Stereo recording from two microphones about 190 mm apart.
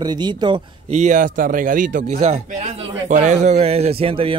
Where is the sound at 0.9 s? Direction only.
40° right (ahead or behind).